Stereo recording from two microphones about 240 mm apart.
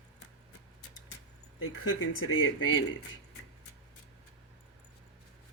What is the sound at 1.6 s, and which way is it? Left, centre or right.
Speech, left.